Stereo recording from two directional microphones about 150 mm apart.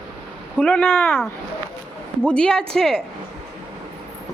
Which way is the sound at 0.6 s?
10° left (ahead or behind).